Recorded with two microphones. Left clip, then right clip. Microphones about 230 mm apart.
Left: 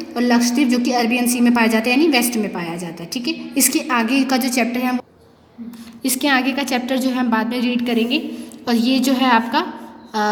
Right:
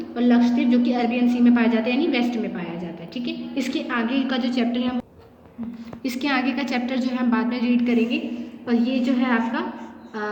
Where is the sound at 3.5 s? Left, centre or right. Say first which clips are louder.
Left 7 dB; left.